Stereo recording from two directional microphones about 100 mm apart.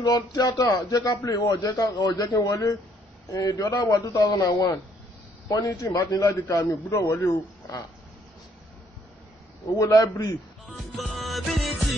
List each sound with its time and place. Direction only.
0.0 s speech: 40° left (ahead or behind)
9.8 s speech: 30° left (ahead or behind)
11.0 s music: centre (ahead or behind)